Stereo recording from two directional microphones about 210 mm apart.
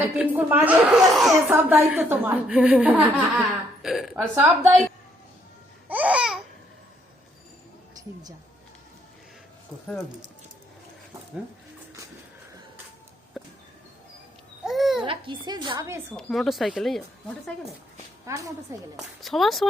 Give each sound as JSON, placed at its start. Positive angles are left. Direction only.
{"t": 0.2, "sound": "speech", "side_deg": -10}
{"t": 5.9, "sound": "babbling", "side_deg": -5}
{"t": 13.4, "sound": "a sound", "side_deg": 0}
{"t": 14.6, "sound": "babbling", "side_deg": 0}
{"t": 15.0, "sound": "a woman's voice", "side_deg": -25}
{"t": 16.1, "sound": "speech", "side_deg": 0}
{"t": 18.3, "sound": "speech", "side_deg": -15}
{"t": 19.2, "sound": "speech", "side_deg": 0}